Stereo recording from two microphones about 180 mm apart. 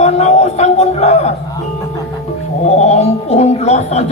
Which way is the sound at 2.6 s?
35° left (ahead or behind).